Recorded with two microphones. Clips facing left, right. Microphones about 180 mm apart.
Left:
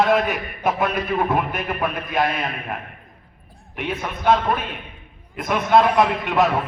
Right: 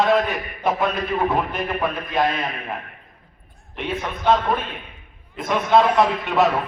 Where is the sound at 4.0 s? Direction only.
5° left (ahead or behind).